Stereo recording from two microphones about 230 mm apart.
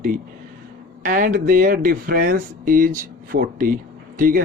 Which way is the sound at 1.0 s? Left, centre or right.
Right.